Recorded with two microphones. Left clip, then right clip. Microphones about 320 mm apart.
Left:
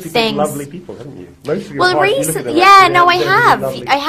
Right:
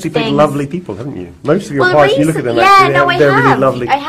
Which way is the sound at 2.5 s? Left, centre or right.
Left.